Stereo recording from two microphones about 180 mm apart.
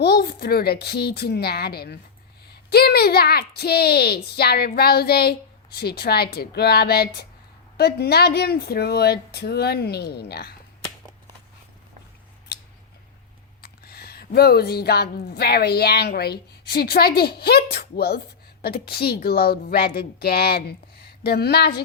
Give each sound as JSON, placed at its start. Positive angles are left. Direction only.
{"t": 0.0, "sound": "a woman's voice", "side_deg": 60}
{"t": 13.6, "sound": "a woman's voice", "side_deg": 60}